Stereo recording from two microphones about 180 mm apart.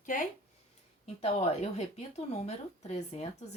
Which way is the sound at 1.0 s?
35° left (ahead or behind).